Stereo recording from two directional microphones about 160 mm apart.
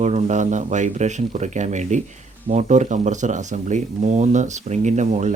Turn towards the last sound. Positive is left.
turn(degrees=-45)  # may be behind; listen again after turning